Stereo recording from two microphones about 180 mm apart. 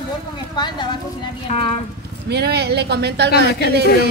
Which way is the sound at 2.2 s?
65° right (ahead or behind).